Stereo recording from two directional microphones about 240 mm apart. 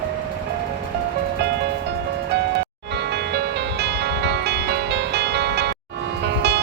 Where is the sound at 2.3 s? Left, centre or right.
Right.